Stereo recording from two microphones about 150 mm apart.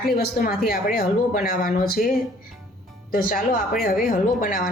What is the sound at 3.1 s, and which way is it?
Speech, 70° left (ahead or behind).